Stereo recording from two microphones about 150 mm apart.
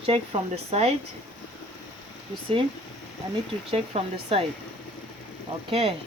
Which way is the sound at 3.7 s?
40° right (ahead or behind).